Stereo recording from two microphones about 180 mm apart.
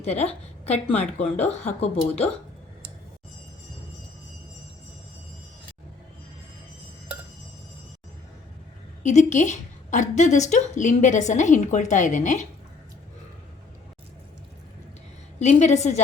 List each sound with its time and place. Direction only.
0.0 s a woman's voice: 35° left (ahead or behind)
9.0 s a woman's voice: 40° left (ahead or behind)
15.4 s speech: 40° left (ahead or behind)